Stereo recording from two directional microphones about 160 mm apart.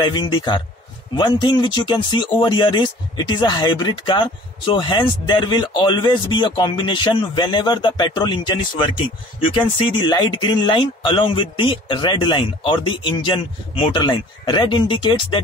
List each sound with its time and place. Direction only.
0.0 s speech: 25° left (ahead or behind)
10.0 s speech: 25° left (ahead or behind)